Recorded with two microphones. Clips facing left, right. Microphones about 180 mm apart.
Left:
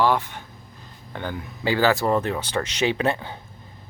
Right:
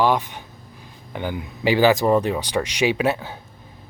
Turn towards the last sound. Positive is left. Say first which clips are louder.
# right 2 dB
turn(degrees=-5)  # may be behind; listen again after turning